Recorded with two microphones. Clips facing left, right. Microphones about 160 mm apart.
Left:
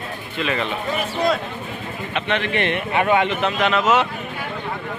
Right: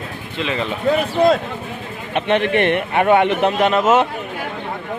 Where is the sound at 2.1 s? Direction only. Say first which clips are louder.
Right 6 dB; 50° right (ahead or behind).